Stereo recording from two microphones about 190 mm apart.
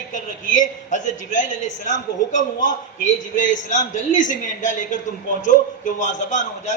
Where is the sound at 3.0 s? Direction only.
40° left (ahead or behind).